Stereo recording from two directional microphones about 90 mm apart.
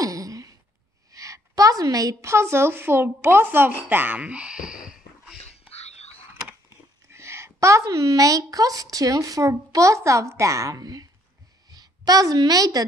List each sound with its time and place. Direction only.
0.0 s a sound: 40° right (ahead or behind)
1.1 s a woman's voice: 40° right (ahead or behind); by 5.4 s 10° right (ahead or behind)
7.1 s a woman's voice: 30° right (ahead or behind)